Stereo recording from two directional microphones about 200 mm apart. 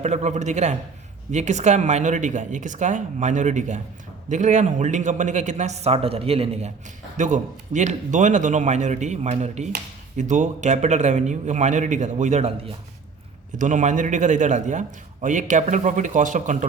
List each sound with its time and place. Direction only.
0.0 s a man's voice: 35° right (ahead or behind)